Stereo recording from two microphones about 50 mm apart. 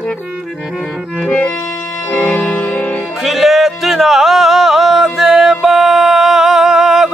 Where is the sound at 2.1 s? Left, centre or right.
Left.